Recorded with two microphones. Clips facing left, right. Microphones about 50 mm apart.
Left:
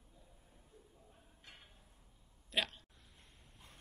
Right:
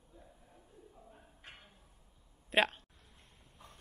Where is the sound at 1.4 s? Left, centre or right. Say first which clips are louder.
Right 5 dB; right.